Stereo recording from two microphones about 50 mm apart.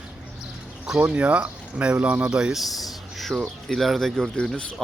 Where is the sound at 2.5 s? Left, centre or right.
Centre.